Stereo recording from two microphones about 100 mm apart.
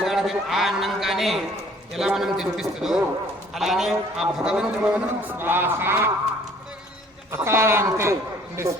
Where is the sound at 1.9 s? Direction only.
5° right (ahead or behind).